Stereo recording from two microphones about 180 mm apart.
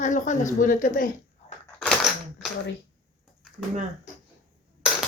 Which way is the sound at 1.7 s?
Centre (ahead or behind).